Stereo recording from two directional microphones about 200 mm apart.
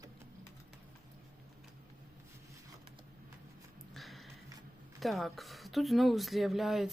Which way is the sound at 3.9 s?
Centre (ahead or behind).